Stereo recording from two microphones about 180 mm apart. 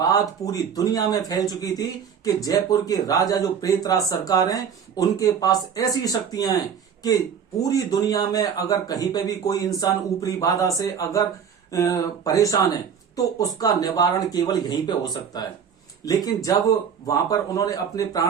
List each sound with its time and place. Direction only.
0.0 s a man's voice: 20° left (ahead or behind)
7.6 s a man's voice: 20° left (ahead or behind)